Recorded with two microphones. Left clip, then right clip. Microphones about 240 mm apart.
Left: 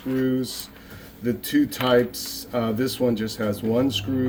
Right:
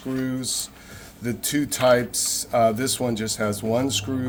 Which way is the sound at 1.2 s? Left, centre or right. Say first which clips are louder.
Left 3 dB; right.